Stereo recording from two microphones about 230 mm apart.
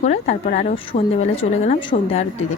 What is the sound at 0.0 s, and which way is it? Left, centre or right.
Speech, left.